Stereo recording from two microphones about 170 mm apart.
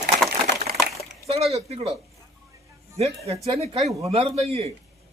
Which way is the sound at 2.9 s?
35° right (ahead or behind).